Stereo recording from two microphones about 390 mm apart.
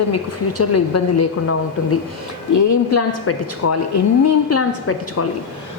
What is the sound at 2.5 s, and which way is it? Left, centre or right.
A woman's voice, left.